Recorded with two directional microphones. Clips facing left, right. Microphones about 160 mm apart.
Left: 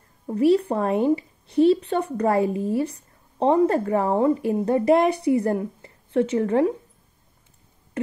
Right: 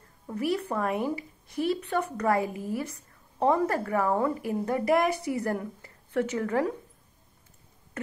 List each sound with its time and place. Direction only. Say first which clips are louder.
0.3 s a woman's voice: left 10 dB; 30° left (ahead or behind)